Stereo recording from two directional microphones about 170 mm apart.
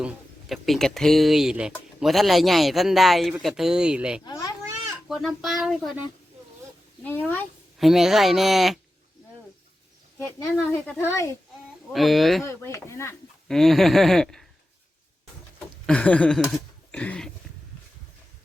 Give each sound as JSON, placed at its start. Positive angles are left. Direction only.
{"t": 0.0, "sound": "speech", "side_deg": 0}
{"t": 4.2, "sound": "a child's voice", "side_deg": 20}
{"t": 5.0, "sound": "speech", "side_deg": 0}
{"t": 7.0, "sound": "speech", "side_deg": 10}
{"t": 7.9, "sound": "speech", "side_deg": 0}
{"t": 10.2, "sound": "speech", "side_deg": 15}
{"t": 11.9, "sound": "speech", "side_deg": 0}
{"t": 12.5, "sound": "speech", "side_deg": 15}
{"t": 13.5, "sound": "speech", "side_deg": 0}
{"t": 15.9, "sound": "speech", "side_deg": 5}